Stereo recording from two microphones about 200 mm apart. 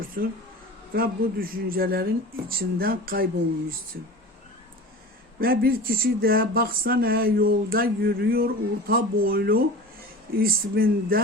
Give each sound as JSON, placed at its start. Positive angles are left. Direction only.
{"t": 0.0, "sound": "a sound", "side_deg": -45}
{"t": 0.9, "sound": "speech", "side_deg": -45}
{"t": 5.4, "sound": "speech", "side_deg": -50}